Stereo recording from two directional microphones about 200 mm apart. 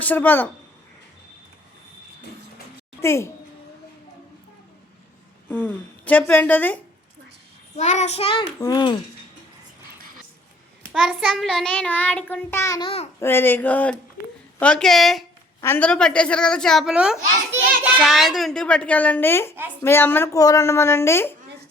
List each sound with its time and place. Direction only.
0.0 s child singing: 10° left (ahead or behind)
3.0 s a child's voice: 15° left (ahead or behind)
5.5 s child singing: 10° left (ahead or behind)
7.8 s a child's voice: 35° left (ahead or behind)
10.9 s child singing: centre (ahead or behind)
14.6 s a child's voice: 5° left (ahead or behind)
19.8 s child singing: 10° left (ahead or behind)